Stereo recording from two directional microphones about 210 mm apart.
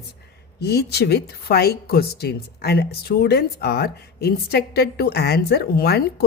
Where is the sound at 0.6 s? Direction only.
50° left (ahead or behind).